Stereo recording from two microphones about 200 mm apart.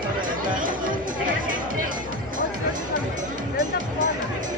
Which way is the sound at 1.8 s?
45° right (ahead or behind).